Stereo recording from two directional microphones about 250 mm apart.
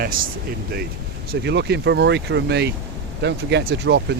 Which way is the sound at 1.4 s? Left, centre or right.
Right.